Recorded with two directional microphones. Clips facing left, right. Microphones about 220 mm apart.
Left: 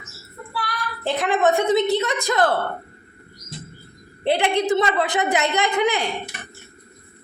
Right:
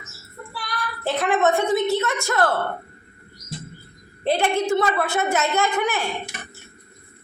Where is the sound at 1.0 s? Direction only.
15° left (ahead or behind).